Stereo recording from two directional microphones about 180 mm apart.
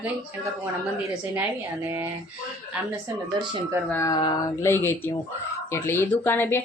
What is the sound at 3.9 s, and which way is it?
Speech, 15° left (ahead or behind).